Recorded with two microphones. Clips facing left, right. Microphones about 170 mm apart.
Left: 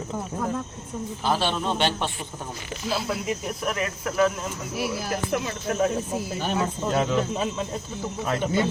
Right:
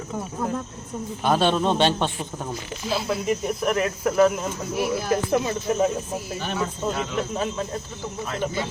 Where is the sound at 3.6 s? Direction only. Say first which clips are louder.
Right 4 dB; 5° right (ahead or behind).